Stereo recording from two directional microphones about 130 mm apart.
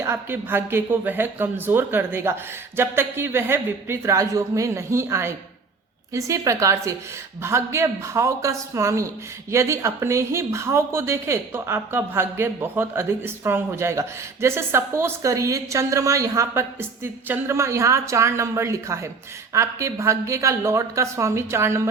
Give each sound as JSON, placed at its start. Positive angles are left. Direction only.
{"t": 0.0, "sound": "a woman's voice", "side_deg": -20}